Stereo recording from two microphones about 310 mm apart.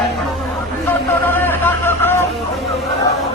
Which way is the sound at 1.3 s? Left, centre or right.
Centre.